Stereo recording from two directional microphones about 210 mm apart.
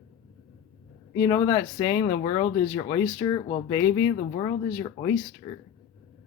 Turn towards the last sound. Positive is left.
turn(degrees=20)  # may be behind; listen again after turning